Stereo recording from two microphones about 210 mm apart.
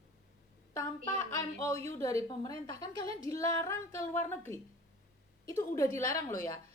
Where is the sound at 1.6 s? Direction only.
15° left (ahead or behind).